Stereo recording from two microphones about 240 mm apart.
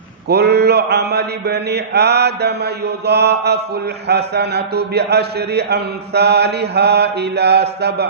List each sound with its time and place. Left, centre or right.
0.3 s a man's voice: right